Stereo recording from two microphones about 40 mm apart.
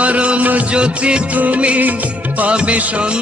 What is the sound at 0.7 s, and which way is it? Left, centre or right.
Music of bollywood, right.